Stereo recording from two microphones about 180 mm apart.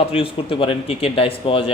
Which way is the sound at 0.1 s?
30° left (ahead or behind).